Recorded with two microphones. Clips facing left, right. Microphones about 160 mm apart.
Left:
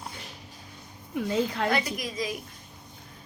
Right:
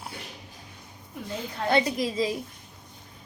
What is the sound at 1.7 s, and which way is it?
Speech, 30° right (ahead or behind).